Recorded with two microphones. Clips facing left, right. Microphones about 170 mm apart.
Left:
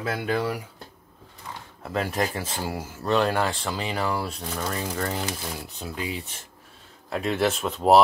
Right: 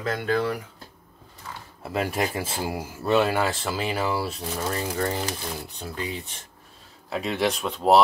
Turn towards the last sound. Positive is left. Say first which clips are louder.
# left 1 dB
turn(degrees=0)  # may be behind; listen again after turning